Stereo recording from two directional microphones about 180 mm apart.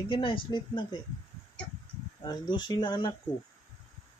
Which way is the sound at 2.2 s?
25° left (ahead or behind).